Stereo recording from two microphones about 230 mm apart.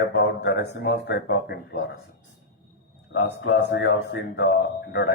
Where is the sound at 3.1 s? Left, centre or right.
Left.